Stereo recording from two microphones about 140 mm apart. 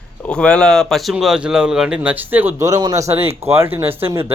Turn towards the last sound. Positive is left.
turn(degrees=-20)  # may be behind; listen again after turning